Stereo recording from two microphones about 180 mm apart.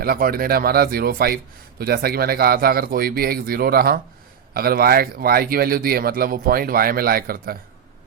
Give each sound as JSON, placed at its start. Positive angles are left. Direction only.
{"t": 0.0, "sound": "speech", "side_deg": -55}